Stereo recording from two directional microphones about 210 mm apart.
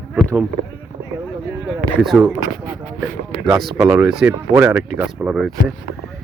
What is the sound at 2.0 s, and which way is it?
Speech, centre (ahead or behind).